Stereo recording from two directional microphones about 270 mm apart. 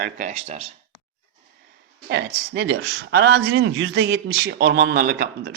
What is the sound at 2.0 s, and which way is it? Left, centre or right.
Speech, right.